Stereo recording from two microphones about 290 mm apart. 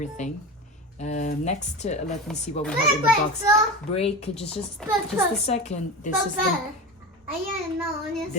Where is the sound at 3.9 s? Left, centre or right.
Left.